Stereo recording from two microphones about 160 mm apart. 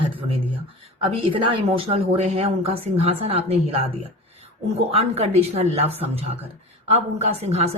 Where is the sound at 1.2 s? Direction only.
35° right (ahead or behind).